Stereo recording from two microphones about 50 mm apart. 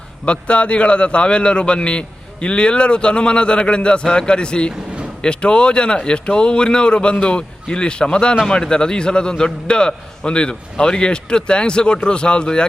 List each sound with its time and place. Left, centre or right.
0.3 s a man's voice: left